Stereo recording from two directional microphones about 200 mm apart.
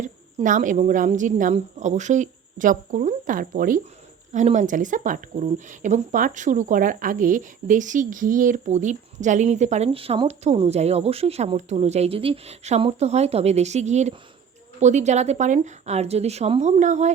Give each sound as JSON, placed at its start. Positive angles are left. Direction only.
{"t": 0.0, "sound": "a woman's voice", "side_deg": -40}